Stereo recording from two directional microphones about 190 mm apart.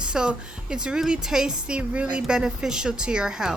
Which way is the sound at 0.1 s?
5° right (ahead or behind).